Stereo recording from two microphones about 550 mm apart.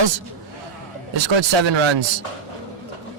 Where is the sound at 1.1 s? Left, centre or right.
Right.